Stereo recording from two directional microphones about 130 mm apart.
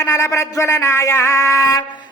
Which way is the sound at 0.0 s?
20° left (ahead or behind).